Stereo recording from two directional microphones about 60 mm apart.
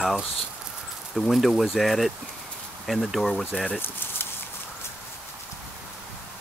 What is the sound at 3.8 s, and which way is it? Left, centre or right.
Speech, left.